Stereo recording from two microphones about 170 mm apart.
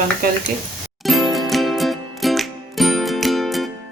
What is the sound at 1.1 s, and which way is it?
Music, centre (ahead or behind).